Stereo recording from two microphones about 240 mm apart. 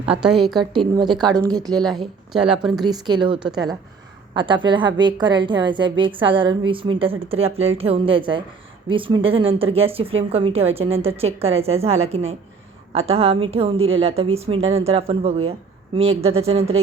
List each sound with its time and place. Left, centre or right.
0.0 s a woman's voice: centre
0.6 s a woman's voice: centre
1.3 s a woman's voice: centre
2.8 s a woman's voice: centre